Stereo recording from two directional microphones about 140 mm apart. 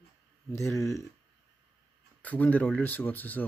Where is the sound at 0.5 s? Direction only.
20° left (ahead or behind).